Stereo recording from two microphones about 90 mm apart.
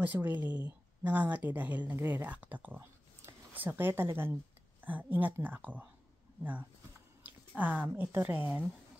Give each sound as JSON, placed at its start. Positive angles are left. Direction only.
{"t": 0.0, "sound": "a woman's voice", "side_deg": -20}
{"t": 7.2, "sound": "speech", "side_deg": -15}